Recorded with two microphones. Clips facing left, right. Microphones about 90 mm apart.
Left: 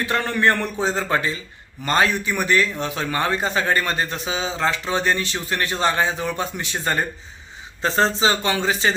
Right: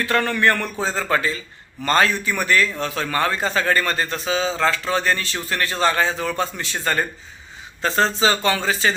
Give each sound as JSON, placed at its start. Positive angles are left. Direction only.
{"t": 0.0, "sound": "a man's voice", "side_deg": 25}